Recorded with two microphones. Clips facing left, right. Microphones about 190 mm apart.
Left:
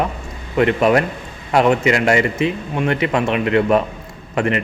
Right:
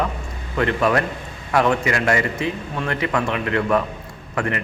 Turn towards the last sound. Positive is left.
turn(degrees=20)  # may be behind; listen again after turning